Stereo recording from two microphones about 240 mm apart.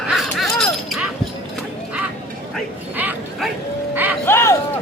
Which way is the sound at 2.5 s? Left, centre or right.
Centre.